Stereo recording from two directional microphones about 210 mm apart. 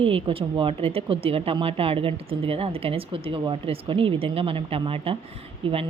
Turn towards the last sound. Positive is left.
turn(degrees=-25)  # may be behind; listen again after turning